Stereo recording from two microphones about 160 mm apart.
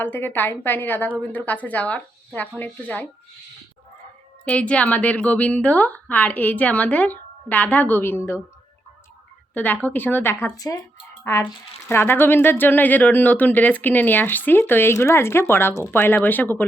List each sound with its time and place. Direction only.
0.0 s speech: 10° left (ahead or behind)
4.4 s speech: 10° left (ahead or behind)
9.8 s speech: 10° left (ahead or behind)